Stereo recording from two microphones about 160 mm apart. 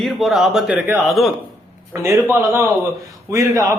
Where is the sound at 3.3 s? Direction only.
20° right (ahead or behind).